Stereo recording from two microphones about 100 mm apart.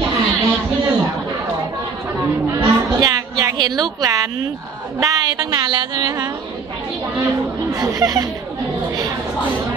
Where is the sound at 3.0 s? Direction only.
40° right (ahead or behind).